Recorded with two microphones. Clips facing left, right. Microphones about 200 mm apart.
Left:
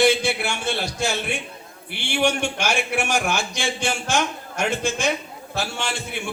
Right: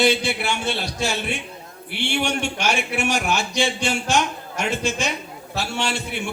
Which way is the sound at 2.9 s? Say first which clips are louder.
Even; 55° left (ahead or behind).